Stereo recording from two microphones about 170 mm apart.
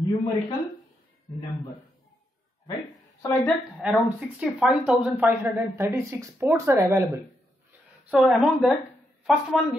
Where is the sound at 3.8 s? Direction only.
10° right (ahead or behind).